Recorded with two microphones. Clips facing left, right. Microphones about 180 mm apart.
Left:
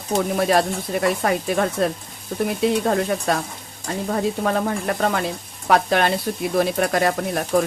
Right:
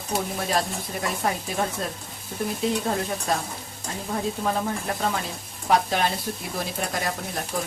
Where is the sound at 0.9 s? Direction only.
70° left (ahead or behind).